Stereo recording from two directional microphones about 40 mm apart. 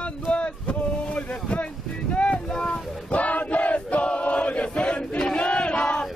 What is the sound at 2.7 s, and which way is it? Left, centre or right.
Choir, left.